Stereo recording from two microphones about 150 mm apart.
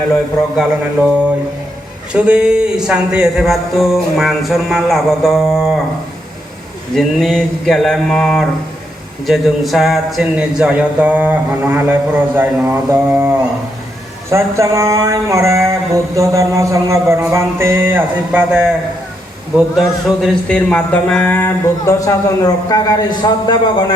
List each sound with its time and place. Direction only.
2.1 s speech: 5° right (ahead or behind)
6.9 s speech: centre (ahead or behind); by 23.6 s 25° left (ahead or behind)